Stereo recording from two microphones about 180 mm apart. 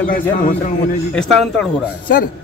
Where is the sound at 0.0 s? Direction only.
50° left (ahead or behind).